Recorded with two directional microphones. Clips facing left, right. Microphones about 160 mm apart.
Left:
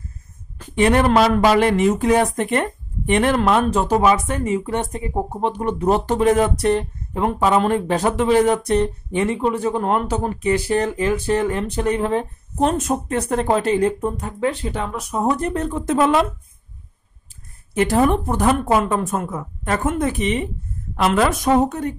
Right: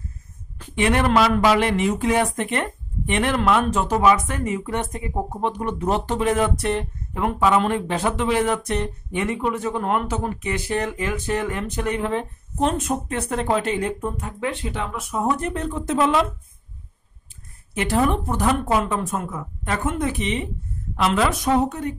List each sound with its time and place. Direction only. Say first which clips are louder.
0.6 s speech: left 4 dB; 40° left (ahead or behind)
17.7 s a woman's voice: left 4 dB; 40° left (ahead or behind)